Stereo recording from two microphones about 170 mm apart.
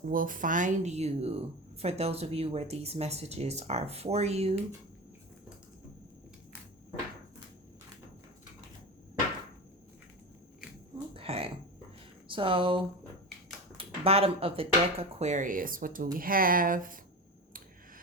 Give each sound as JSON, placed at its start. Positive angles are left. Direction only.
{"t": 0.0, "sound": "speech", "side_deg": -55}
{"t": 11.1, "sound": "a sound", "side_deg": -35}
{"t": 12.3, "sound": "speech", "side_deg": -30}